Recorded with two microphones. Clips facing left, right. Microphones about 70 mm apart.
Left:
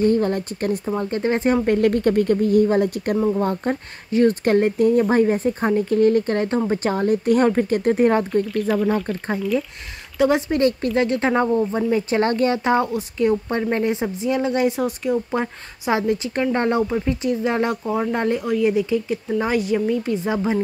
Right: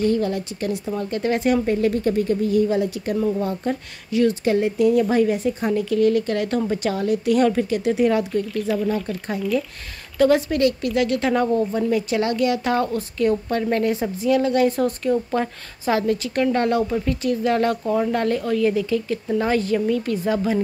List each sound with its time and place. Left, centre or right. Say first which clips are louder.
0.0 s speech: left 2 dB; left
1.7 s speech: left 3 dB; left
8.5 s speech: left 1 dB; centre
8.8 s speech: left 2 dB; left
9.4 s speech: right 1 dB; centre
10.1 s a woman's voice: right 1 dB; left
11.9 s a woman's voice: left 2 dB; left
16.8 s a woman's voice: left 1 dB; centre